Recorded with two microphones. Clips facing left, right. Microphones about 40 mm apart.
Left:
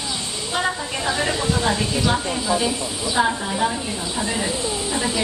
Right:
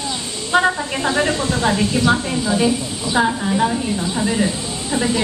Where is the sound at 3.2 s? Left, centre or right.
Centre.